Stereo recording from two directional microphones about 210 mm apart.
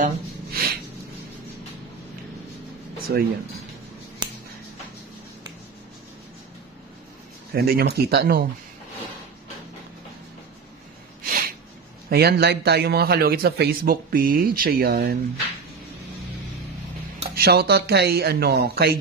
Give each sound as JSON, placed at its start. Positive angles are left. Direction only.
{"t": 0.0, "sound": "a sound", "side_deg": -45}
{"t": 3.1, "sound": "speech", "side_deg": -45}
{"t": 7.5, "sound": "speech", "side_deg": -45}
{"t": 11.2, "sound": "a sound", "side_deg": -45}
{"t": 12.1, "sound": "speech", "side_deg": -50}
{"t": 17.4, "sound": "speech", "side_deg": -50}